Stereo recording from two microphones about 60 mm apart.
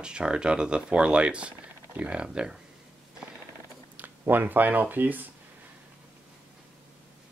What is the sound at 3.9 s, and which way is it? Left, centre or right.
Speech, right.